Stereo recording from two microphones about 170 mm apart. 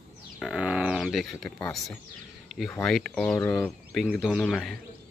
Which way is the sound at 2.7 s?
5° left (ahead or behind).